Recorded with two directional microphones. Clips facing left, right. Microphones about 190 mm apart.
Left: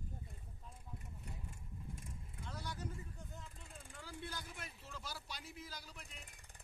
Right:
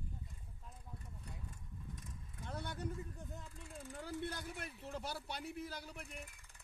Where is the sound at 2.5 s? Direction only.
60° right (ahead or behind).